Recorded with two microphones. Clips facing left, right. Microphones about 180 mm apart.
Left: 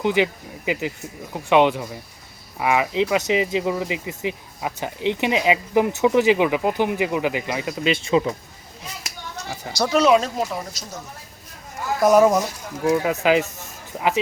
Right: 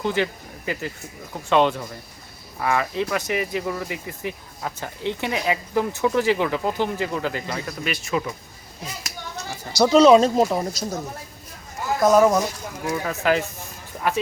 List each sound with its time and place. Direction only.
0.0 s speech: 15° left (ahead or behind)
9.9 s speech: 25° right (ahead or behind)
12.0 s speech: 15° left (ahead or behind)